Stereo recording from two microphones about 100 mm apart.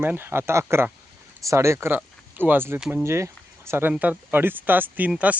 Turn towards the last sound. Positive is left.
turn(degrees=-20)  # may be behind; listen again after turning